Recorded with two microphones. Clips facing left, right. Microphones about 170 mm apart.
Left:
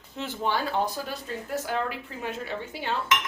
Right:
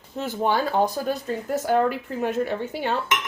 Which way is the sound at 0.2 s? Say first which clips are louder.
Right 5 dB; 50° right (ahead or behind).